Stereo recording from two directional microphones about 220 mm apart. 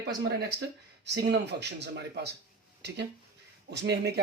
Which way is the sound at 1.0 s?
50° right (ahead or behind).